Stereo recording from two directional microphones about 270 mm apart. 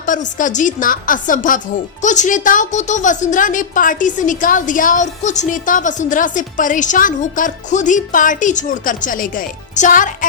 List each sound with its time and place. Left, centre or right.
0.0 s speech: left